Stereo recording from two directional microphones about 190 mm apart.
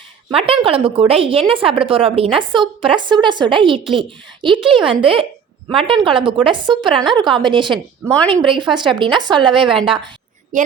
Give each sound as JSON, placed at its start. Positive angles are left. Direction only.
{"t": 0.3, "sound": "a woman's voice", "side_deg": -30}